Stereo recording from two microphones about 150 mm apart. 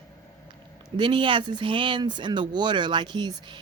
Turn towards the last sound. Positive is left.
turn(degrees=-30)  # may be behind; listen again after turning